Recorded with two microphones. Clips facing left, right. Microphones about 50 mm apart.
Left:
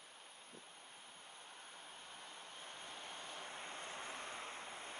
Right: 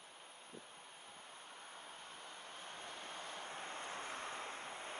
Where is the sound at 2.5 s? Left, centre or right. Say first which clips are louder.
Right 3 dB; right.